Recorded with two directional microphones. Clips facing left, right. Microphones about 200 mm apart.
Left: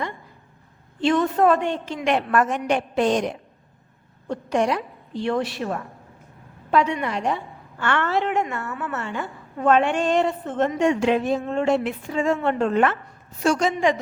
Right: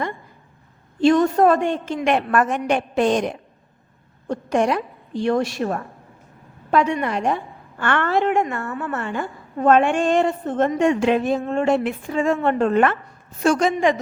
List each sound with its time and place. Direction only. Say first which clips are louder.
1.0 s a woman's voice: right 4 dB; 40° right (ahead or behind)